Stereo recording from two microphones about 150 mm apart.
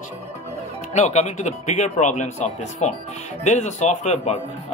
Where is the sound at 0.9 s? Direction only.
50° left (ahead or behind).